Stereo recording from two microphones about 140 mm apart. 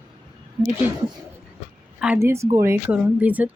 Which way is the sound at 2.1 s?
20° right (ahead or behind).